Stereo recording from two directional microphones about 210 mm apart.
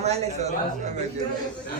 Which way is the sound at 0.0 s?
30° right (ahead or behind).